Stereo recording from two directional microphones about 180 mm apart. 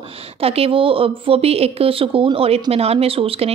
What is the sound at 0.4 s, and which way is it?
A woman's voice, 35° right (ahead or behind).